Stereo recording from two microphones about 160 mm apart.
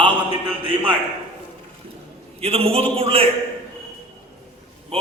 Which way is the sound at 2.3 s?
40° right (ahead or behind).